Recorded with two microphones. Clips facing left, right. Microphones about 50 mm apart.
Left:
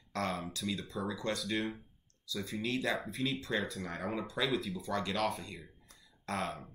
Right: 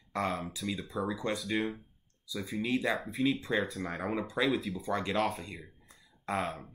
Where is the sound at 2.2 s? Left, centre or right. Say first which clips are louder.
Right 2 dB; centre.